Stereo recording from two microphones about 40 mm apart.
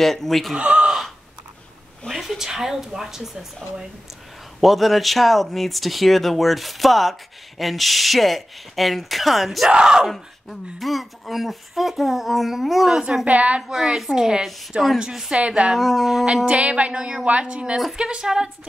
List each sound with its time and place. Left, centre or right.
0.0 s speech: centre
0.6 s a sound: right
2.0 s speech: centre
4.6 s speech: centre
9.7 s a woman's voice: centre
10.0 s speech: centre
13.2 s a woman's voice: right
13.6 s a woman's voice: centre
15.3 s a woman's voice: right
15.7 s speech: centre
16.4 s a woman's voice: right